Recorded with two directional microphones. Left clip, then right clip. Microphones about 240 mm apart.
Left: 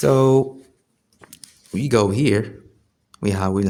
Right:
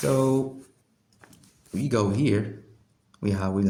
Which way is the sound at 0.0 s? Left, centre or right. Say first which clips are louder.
Left 8 dB; left.